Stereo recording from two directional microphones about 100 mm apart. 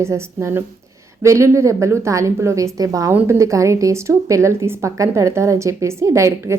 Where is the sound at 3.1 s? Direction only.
25° right (ahead or behind).